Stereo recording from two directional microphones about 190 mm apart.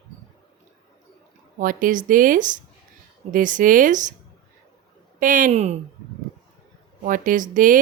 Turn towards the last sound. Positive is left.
turn(degrees=-45)  # may be behind; listen again after turning